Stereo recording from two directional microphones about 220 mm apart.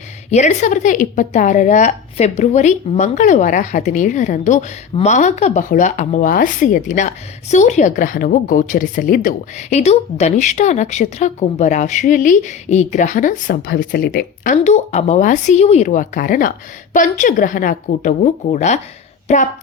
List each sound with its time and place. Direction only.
0.3 s a woman's voice: 30° left (ahead or behind)